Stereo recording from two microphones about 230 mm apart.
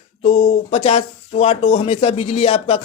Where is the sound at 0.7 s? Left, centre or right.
Left.